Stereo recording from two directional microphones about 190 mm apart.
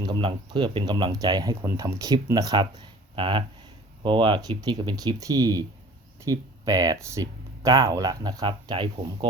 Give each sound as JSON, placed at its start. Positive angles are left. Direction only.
{"t": 0.0, "sound": "speech", "side_deg": -25}